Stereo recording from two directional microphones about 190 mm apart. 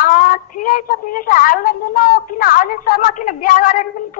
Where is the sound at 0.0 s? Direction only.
45° left (ahead or behind).